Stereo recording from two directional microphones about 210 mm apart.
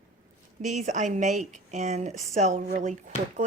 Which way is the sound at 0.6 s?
35° right (ahead or behind).